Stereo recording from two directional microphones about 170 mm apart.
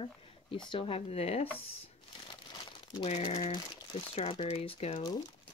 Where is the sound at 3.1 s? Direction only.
40° left (ahead or behind).